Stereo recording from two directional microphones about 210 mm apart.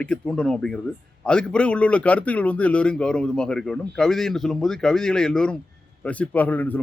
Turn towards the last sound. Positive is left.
turn(degrees=10)  # may be behind; listen again after turning